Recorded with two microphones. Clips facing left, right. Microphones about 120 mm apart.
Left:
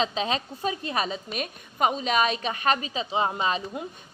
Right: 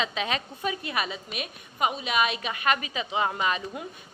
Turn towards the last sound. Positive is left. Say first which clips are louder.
# left 1 dB
turn(degrees=25)  # may be behind; listen again after turning